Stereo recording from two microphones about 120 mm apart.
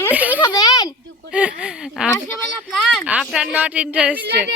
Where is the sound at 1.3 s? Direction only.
10° right (ahead or behind).